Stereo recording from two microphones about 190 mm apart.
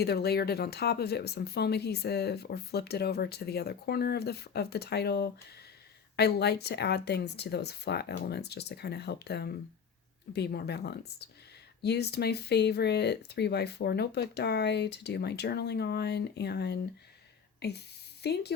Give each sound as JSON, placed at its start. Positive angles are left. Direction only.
{"t": 0.0, "sound": "a woman's voice", "side_deg": 55}